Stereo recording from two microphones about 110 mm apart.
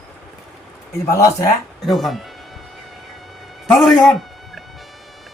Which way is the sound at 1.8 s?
Centre (ahead or behind).